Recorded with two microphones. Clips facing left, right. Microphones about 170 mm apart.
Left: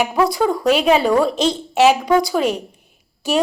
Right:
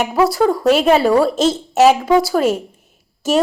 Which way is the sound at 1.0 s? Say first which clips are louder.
Right 2 dB; 5° right (ahead or behind).